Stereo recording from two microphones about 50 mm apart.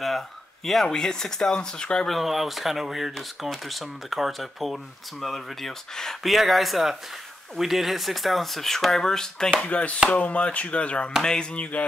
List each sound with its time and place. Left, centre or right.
0.7 s speech: centre
2.0 s speech: centre
9.6 s speech: left